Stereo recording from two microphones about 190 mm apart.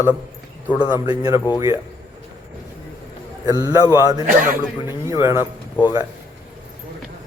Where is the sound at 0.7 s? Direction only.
5° right (ahead or behind).